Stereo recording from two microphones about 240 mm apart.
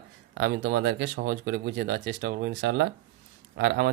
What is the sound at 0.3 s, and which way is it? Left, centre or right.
Speech, right.